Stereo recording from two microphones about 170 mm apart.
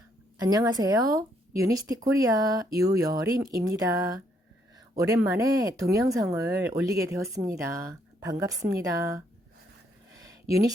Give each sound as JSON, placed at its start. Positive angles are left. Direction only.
{"t": 0.3, "sound": "speech", "side_deg": -20}